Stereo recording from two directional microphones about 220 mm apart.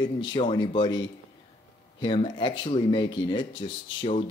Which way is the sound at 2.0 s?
20° left (ahead or behind).